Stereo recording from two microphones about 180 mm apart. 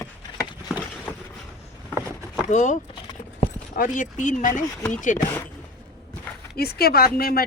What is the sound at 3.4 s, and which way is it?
Clip-clop, 45° left (ahead or behind).